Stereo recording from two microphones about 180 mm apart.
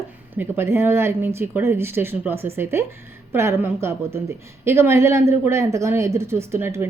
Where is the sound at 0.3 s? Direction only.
10° right (ahead or behind).